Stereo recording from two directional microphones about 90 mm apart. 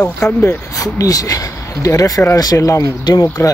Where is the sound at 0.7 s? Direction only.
40° left (ahead or behind).